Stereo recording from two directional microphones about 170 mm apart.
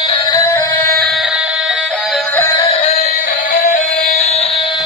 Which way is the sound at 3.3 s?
55° left (ahead or behind).